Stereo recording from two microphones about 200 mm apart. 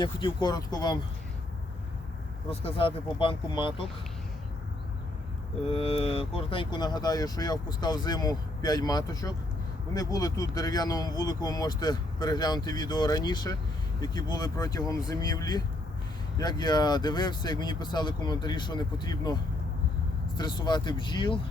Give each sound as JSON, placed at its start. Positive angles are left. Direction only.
{"t": 0.0, "sound": "speech", "side_deg": 25}
{"t": 2.5, "sound": "speech", "side_deg": 30}
{"t": 5.7, "sound": "speech", "side_deg": 30}